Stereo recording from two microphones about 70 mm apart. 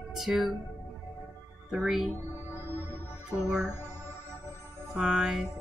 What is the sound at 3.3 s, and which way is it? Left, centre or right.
Music, right.